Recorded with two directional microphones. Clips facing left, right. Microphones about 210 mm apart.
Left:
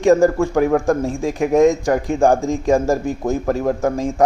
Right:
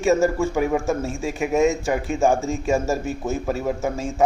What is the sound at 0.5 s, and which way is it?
Speech, 65° left (ahead or behind).